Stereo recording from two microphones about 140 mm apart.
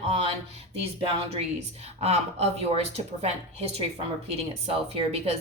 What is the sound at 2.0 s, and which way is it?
Speech, 45° right (ahead or behind).